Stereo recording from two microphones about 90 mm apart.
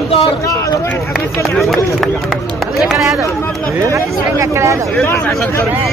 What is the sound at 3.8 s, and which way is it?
Speech, 35° right (ahead or behind).